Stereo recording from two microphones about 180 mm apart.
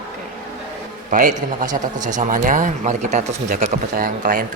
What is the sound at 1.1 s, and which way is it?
Speech, 45° right (ahead or behind).